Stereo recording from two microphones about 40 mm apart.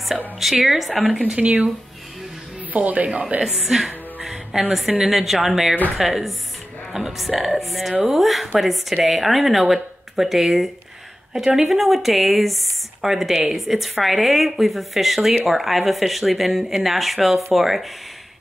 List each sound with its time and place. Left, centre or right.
0.4 s a woman's voice: centre
2.7 s speech: right
3.5 s music: centre
4.7 s a woman's voice: centre